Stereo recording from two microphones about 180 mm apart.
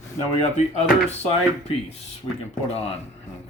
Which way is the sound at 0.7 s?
35° left (ahead or behind).